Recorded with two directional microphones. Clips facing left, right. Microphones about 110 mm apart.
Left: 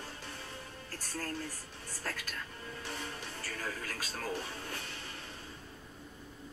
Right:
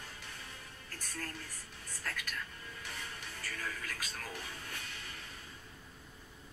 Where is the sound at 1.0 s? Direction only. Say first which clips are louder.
Left 5 dB; 30° left (ahead or behind).